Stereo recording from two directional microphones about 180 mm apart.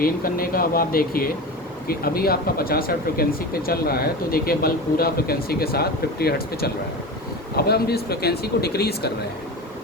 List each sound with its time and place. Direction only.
0.0 s speech: 55° left (ahead or behind)